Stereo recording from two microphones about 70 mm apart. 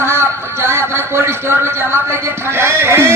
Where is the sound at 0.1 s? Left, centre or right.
Right.